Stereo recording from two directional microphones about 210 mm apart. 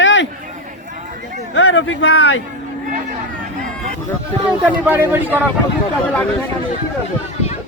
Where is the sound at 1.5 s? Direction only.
60° left (ahead or behind); by 2.4 s 85° left.